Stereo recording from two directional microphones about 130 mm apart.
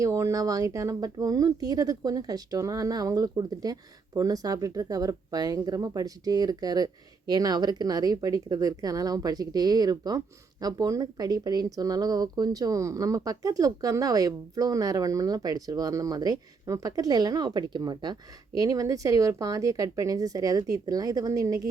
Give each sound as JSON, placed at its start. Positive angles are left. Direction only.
{"t": 0.0, "sound": "speech", "side_deg": -25}